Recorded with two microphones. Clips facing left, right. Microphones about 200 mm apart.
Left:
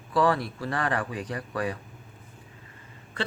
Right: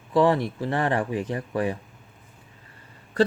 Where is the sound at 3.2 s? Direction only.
40° right (ahead or behind).